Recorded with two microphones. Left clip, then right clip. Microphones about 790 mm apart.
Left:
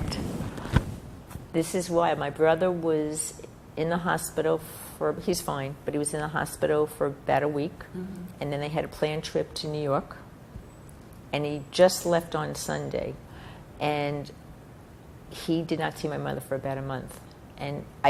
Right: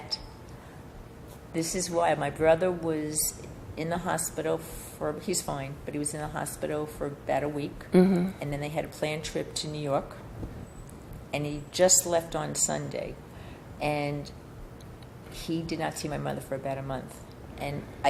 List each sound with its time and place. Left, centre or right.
1.5 s speech: left
11.3 s speech: left
15.4 s speech: left